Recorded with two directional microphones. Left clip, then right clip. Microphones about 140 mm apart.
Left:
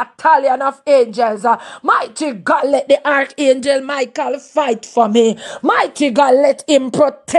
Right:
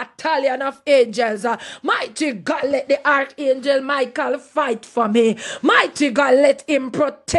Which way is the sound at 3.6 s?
50° left (ahead or behind).